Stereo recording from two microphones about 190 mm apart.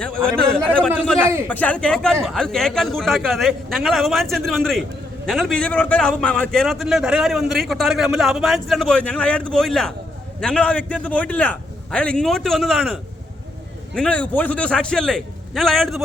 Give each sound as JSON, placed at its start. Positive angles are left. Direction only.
{"t": 0.3, "sound": "a man's voice", "side_deg": 5}